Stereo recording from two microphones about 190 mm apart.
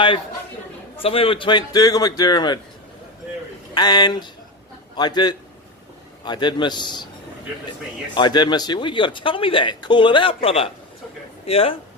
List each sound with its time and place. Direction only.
1.0 s speech: 30° left (ahead or behind)
3.8 s speech: 20° left (ahead or behind)
8.1 s a man's voice: 25° left (ahead or behind)